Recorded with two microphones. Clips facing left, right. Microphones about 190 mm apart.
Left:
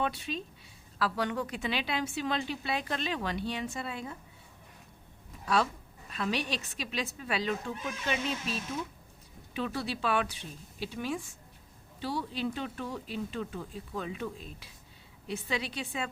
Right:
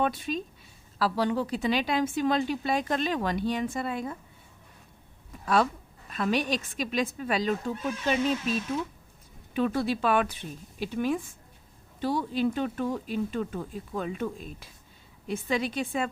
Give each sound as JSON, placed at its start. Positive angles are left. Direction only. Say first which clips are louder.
{"t": 0.0, "sound": "a woman's voice", "louder": "right 5 dB", "side_deg": -50}
{"t": 0.9, "sound": "a woman's voice", "louder": "right 5 dB", "side_deg": -35}
{"t": 6.1, "sound": "a woman's voice", "louder": "right 6 dB", "side_deg": -50}
{"t": 9.6, "sound": "a woman's voice", "louder": "right 7 dB", "side_deg": -50}